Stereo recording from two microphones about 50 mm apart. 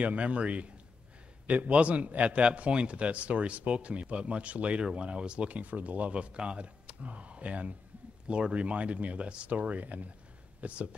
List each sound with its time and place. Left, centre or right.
0.0 s a man's voice: right